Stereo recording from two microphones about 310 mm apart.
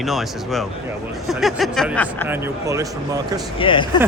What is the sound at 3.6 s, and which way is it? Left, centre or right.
Speech, centre.